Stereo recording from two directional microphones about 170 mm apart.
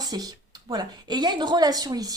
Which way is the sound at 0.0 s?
20° right (ahead or behind).